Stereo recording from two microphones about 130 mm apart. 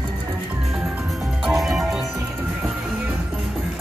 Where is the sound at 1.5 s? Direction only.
Centre (ahead or behind).